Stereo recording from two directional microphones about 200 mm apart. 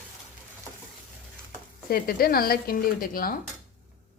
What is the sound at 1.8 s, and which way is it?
Speech, 50° left (ahead or behind).